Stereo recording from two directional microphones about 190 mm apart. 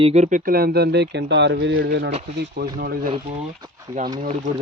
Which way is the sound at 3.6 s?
20° right (ahead or behind).